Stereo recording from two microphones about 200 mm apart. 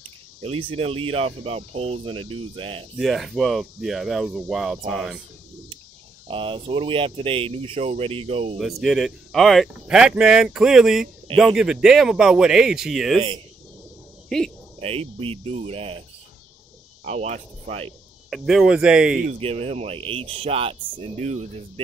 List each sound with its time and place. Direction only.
0.4 s speech: 30° right (ahead or behind)
3.0 s speech: centre (ahead or behind)
6.2 s speech: 25° right (ahead or behind)
8.5 s speech: centre (ahead or behind)
14.8 s speech: 30° right (ahead or behind)
17.0 s speech: 30° right (ahead or behind)
18.3 s speech: centre (ahead or behind)
19.2 s speech: 30° right (ahead or behind)